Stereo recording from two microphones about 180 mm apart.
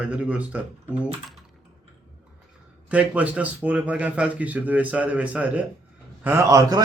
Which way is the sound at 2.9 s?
5° right (ahead or behind).